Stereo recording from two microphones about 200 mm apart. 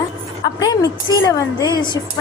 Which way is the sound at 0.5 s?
20° left (ahead or behind).